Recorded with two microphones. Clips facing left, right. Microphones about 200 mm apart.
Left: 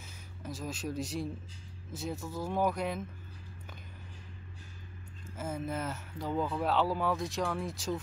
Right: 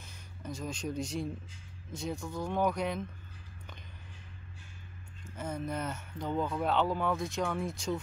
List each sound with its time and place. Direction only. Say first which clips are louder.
0.0 s speech: even; centre (ahead or behind)
5.2 s speech: even; 5° left (ahead or behind)